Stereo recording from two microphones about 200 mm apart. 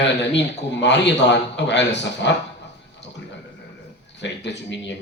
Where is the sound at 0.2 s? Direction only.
60° left (ahead or behind).